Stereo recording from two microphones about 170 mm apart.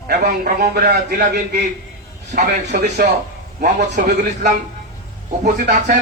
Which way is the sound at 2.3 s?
45° right (ahead or behind).